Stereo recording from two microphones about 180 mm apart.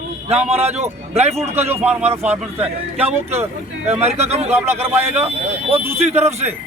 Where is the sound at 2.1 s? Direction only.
35° right (ahead or behind).